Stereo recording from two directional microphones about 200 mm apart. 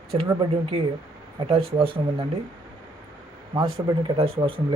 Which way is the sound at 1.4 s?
20° right (ahead or behind).